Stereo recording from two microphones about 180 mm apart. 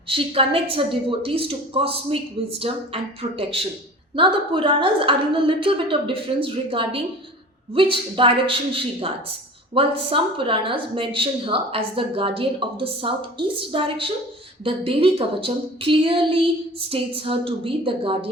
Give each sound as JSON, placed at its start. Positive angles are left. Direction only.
{"t": 0.1, "sound": "a woman's voice", "side_deg": -30}